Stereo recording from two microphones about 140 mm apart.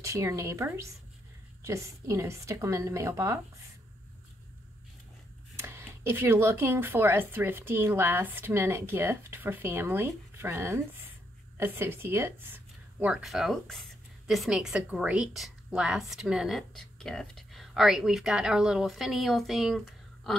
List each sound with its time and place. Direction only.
0.0 s a woman's voice: 20° right (ahead or behind)
5.6 s speech: 20° right (ahead or behind); by 20.3 s centre (ahead or behind)